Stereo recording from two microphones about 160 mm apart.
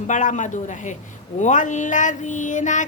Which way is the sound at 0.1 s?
50° left (ahead or behind).